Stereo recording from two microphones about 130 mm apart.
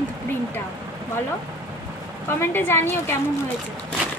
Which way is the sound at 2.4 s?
15° left (ahead or behind).